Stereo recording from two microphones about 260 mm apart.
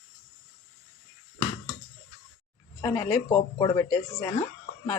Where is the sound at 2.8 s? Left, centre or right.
Centre.